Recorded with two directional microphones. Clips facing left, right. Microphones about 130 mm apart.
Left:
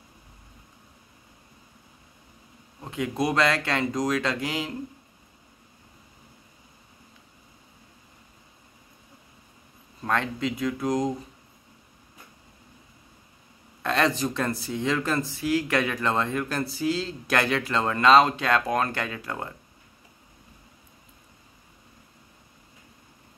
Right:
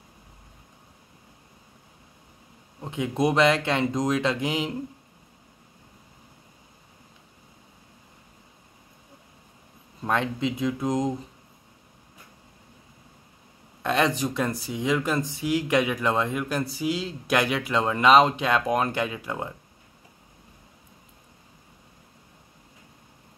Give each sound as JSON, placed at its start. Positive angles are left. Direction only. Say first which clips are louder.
{"t": 2.8, "sound": "speech", "louder": "right 2 dB", "side_deg": -20}
{"t": 10.0, "sound": "speech", "louder": "right 1 dB", "side_deg": -20}
{"t": 13.8, "sound": "speech", "louder": "right 1 dB", "side_deg": -15}